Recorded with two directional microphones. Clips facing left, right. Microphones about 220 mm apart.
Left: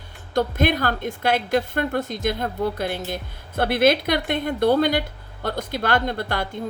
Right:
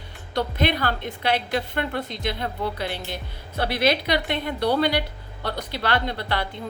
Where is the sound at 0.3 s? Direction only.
45° left (ahead or behind).